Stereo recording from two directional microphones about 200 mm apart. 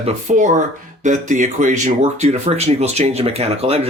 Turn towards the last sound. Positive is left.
turn(degrees=-30)  # may be behind; listen again after turning